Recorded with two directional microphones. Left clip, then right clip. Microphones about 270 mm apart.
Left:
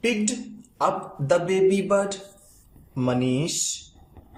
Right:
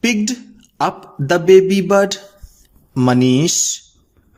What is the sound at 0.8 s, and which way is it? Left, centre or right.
A man's voice, right.